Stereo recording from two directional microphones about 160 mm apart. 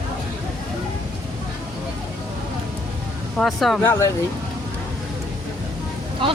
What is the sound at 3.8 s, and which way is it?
Speech, 15° left (ahead or behind).